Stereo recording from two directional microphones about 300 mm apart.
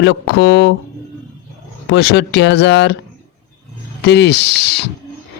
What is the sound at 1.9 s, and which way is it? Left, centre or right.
Speech, left.